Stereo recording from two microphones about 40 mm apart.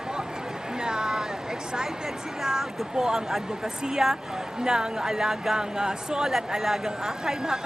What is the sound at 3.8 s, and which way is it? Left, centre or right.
Speech, centre.